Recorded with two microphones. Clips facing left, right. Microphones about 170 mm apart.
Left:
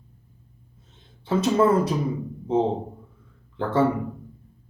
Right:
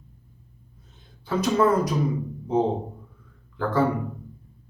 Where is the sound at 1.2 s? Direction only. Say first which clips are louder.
Left 1 dB; 25° left (ahead or behind).